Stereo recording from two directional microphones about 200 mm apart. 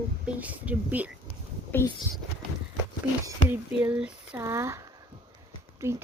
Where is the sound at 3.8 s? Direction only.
5° right (ahead or behind).